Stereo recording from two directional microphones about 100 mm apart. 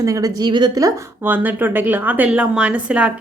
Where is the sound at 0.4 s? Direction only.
45° right (ahead or behind).